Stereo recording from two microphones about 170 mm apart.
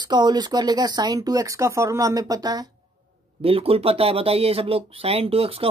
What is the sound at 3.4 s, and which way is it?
Speech, 35° right (ahead or behind).